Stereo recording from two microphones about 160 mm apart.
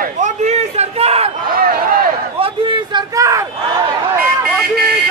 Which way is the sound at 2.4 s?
35° right (ahead or behind).